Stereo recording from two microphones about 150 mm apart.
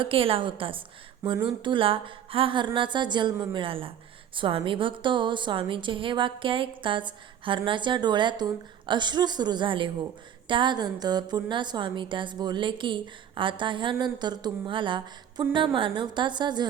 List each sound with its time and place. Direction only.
0.0 s a woman's voice: 35° right (ahead or behind)